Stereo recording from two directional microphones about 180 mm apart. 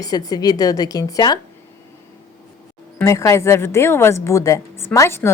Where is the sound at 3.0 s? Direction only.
15° left (ahead or behind).